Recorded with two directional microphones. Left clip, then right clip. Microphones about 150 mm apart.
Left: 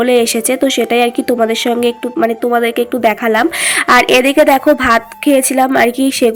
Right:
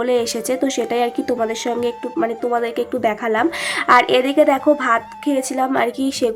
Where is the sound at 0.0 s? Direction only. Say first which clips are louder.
Left 7 dB; 20° left (ahead or behind).